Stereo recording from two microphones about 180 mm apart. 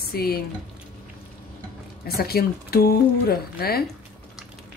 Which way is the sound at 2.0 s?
60° left (ahead or behind).